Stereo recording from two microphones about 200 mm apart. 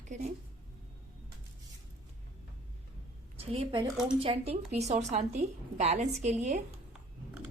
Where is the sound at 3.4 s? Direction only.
30° right (ahead or behind).